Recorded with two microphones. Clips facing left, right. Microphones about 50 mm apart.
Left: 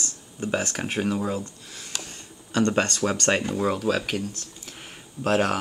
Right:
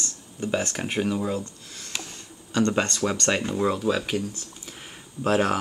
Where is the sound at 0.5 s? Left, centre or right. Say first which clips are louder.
Even; left.